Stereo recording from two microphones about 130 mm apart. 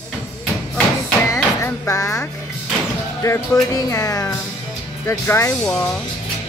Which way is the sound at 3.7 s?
25° left (ahead or behind).